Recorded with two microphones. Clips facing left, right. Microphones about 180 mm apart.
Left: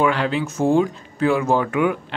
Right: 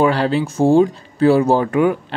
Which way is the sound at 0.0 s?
35° right (ahead or behind).